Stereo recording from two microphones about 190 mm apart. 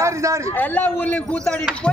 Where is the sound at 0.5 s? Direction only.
10° left (ahead or behind).